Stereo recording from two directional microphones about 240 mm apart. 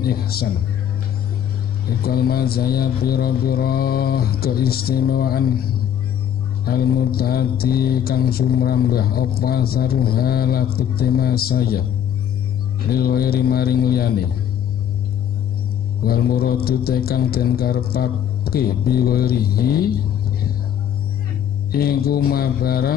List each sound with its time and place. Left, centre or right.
0.0 s speech: left
2.0 s speech: left
12.9 s speech: left
16.0 s speech: left
21.7 s speech: left